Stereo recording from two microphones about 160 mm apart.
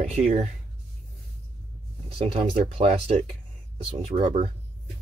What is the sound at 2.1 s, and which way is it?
Speech, 35° right (ahead or behind).